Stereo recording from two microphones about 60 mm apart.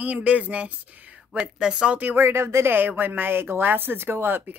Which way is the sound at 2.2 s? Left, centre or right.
Right.